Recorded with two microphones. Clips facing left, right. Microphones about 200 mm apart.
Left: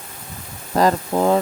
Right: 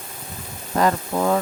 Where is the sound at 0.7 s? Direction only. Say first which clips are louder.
Left 3 dB; 30° left (ahead or behind).